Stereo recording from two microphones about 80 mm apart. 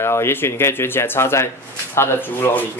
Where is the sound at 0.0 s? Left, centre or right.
Left.